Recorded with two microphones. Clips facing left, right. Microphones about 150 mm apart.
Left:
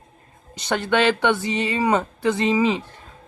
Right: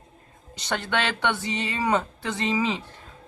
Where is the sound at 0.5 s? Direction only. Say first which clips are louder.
Left 6 dB; 15° left (ahead or behind).